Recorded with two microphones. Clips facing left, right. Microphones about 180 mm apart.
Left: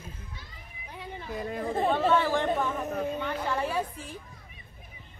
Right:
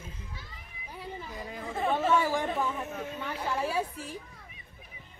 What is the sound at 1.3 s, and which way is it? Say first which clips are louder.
Speech: left 11 dB; 55° left (ahead or behind).